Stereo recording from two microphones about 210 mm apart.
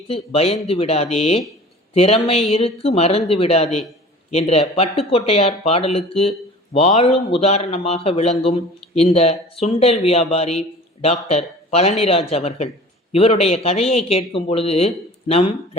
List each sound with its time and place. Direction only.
0.1 s speech: 30° left (ahead or behind)